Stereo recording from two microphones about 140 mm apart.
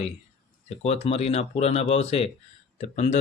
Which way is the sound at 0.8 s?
50° left (ahead or behind).